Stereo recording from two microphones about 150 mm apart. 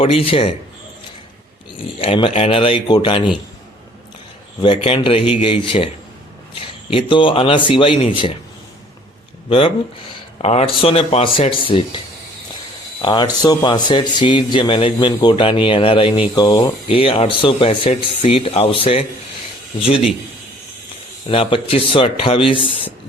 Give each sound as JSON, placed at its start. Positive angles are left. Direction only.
{"t": 0.0, "sound": "speech", "side_deg": 40}
{"t": 2.0, "sound": "speech", "side_deg": 35}
{"t": 4.6, "sound": "a man's voice", "side_deg": 35}
{"t": 9.5, "sound": "speech", "side_deg": 35}
{"t": 13.0, "sound": "speech", "side_deg": 30}
{"t": 21.2, "sound": "speech", "side_deg": 40}